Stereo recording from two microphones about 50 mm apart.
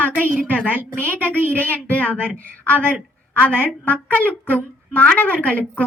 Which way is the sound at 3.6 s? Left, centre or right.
Left.